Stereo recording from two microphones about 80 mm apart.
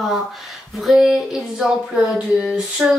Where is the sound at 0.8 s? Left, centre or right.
Centre.